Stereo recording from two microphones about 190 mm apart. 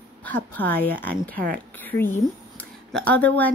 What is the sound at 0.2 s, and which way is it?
A woman's voice, 10° left (ahead or behind).